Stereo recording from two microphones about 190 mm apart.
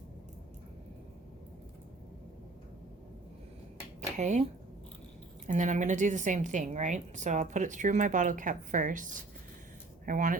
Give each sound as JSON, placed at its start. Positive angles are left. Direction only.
{"t": 4.2, "sound": "a woman's voice", "side_deg": -40}
{"t": 5.5, "sound": "a woman's voice", "side_deg": -40}
{"t": 10.1, "sound": "speech", "side_deg": -45}